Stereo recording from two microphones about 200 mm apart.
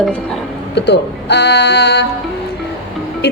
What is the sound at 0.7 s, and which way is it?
Speech, 60° left (ahead or behind).